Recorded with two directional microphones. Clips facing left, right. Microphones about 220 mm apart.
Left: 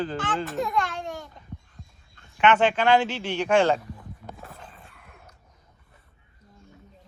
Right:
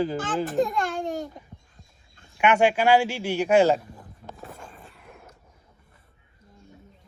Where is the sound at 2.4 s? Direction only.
10° right (ahead or behind).